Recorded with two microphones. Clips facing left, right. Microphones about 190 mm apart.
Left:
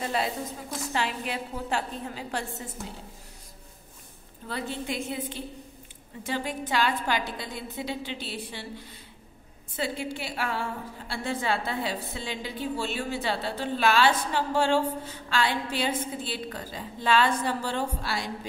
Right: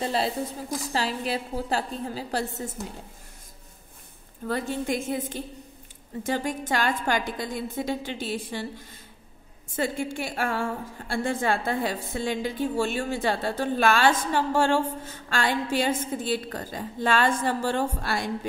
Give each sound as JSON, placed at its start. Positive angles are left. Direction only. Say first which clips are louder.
{"t": 0.0, "sound": "a woman's voice", "louder": "right 3 dB", "side_deg": -30}
{"t": 4.5, "sound": "a woman's voice", "louder": "right 5 dB", "side_deg": -45}